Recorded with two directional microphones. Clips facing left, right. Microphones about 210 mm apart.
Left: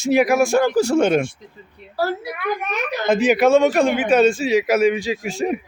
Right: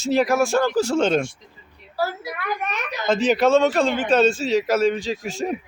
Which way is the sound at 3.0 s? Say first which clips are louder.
Left 2 dB; 10° left (ahead or behind).